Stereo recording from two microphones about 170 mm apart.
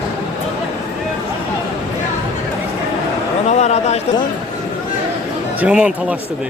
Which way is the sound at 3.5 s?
40° left (ahead or behind).